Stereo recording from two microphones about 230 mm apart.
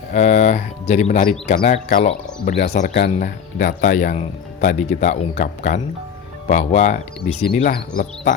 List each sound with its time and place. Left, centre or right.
0.1 s speech: left